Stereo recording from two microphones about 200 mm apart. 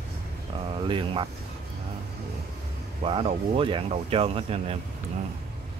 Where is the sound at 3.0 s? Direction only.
30° right (ahead or behind).